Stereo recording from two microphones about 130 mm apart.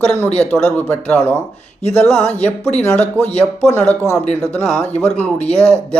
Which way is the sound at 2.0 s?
5° left (ahead or behind).